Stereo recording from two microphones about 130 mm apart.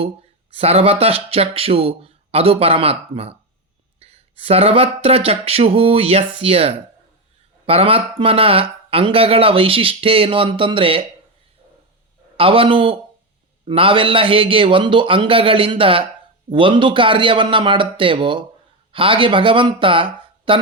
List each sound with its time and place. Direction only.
0.5 s speech: 50° right (ahead or behind)
12.4 s a man's voice: 45° right (ahead or behind)